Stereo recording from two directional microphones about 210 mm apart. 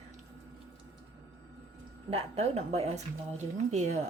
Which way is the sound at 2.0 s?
30° right (ahead or behind).